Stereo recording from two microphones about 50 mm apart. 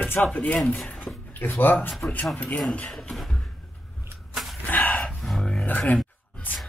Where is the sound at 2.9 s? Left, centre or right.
Centre.